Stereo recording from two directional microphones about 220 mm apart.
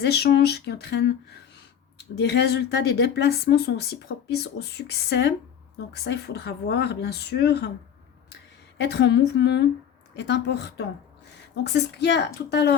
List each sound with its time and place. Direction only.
0.0 s speech: 50° left (ahead or behind)
2.1 s speech: 50° left (ahead or behind)
8.8 s speech: 50° left (ahead or behind)